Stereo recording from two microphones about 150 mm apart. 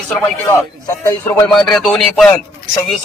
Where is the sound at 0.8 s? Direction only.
20° left (ahead or behind).